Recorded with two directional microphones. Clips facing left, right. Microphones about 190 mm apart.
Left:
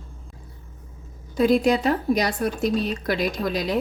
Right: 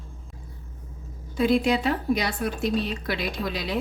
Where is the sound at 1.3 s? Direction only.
40° left (ahead or behind).